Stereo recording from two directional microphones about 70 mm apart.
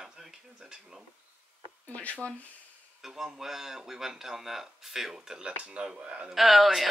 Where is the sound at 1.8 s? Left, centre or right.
Centre.